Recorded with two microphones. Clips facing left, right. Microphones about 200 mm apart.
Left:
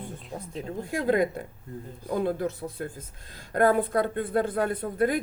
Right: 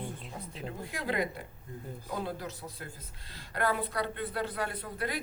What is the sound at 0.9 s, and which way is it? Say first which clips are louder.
Speech: left 9 dB; 45° left (ahead or behind).